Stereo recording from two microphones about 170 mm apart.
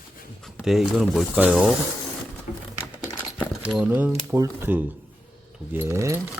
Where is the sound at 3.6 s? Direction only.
5° right (ahead or behind).